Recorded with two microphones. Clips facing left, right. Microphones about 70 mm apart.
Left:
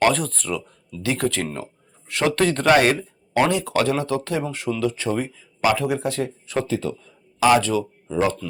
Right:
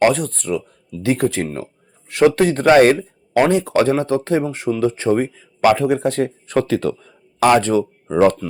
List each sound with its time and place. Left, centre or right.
0.1 s speech: centre
1.0 s speech: right
2.8 s a sound: right
3.5 s speech: right
6.7 s speech: right
7.3 s speech: right
8.1 s speech: right